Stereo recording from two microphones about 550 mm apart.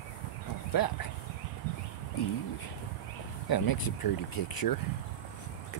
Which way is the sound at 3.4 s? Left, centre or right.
Left.